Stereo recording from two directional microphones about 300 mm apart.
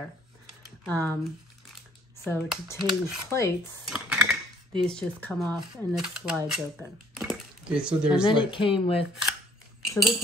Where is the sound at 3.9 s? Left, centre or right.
Centre.